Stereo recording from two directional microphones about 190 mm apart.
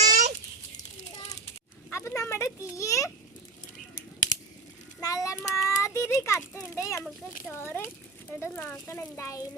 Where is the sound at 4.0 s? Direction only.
45° left (ahead or behind).